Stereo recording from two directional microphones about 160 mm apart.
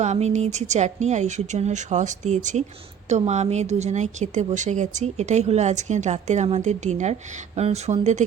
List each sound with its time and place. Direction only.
0.0 s speech: 45° right (ahead or behind)